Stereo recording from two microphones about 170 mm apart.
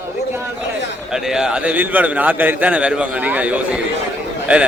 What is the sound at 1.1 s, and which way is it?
A man's voice, 5° right (ahead or behind).